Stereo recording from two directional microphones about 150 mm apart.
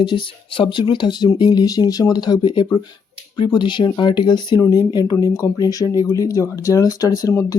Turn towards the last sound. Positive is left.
turn(degrees=25)  # may be behind; listen again after turning